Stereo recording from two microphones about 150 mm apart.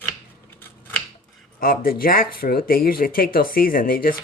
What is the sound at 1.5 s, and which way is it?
Speech, 75° left (ahead or behind).